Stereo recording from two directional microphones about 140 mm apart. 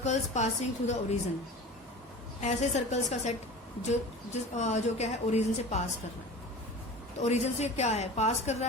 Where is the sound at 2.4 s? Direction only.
55° left (ahead or behind).